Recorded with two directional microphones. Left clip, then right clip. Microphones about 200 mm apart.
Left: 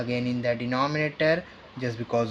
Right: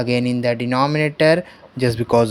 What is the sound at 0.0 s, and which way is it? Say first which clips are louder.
Speech: right 8 dB; 45° right (ahead or behind).